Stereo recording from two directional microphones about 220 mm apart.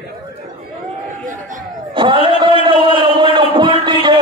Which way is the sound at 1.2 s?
35° right (ahead or behind).